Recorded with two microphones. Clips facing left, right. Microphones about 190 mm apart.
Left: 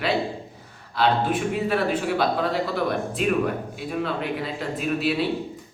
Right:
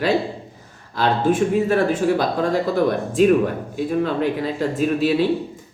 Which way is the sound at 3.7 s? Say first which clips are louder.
Right 6 dB; 45° right (ahead or behind).